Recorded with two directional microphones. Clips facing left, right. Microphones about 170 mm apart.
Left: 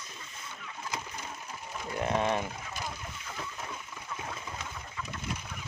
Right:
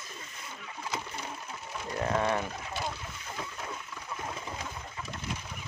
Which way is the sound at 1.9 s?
20° left (ahead or behind).